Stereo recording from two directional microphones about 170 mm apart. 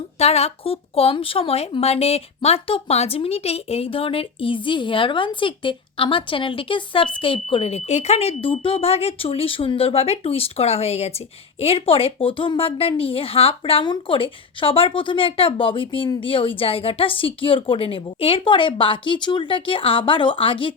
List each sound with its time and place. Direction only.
0.2 s a woman's voice: 35° left (ahead or behind)